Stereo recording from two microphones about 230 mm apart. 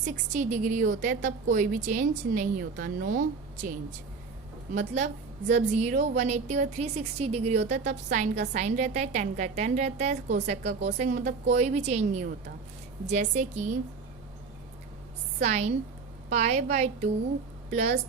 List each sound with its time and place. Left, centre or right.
0.0 s a woman's voice: right
4.7 s a woman's voice: right
15.4 s a woman's voice: right